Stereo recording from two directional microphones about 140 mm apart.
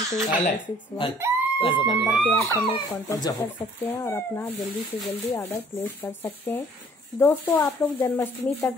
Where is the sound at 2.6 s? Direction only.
30° left (ahead or behind).